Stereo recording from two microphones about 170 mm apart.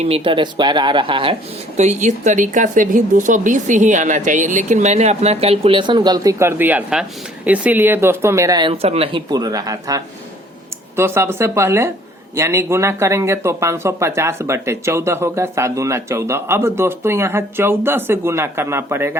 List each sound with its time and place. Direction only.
0.0 s speech: 30° right (ahead or behind)
8.7 s speech: 35° right (ahead or behind); by 19.2 s 15° right (ahead or behind)